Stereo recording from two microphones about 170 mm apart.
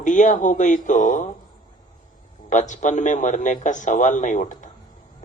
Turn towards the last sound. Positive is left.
turn(degrees=50)  # may be behind; listen again after turning